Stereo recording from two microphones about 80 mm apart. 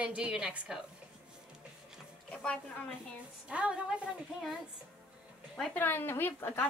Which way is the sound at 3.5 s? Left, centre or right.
Centre.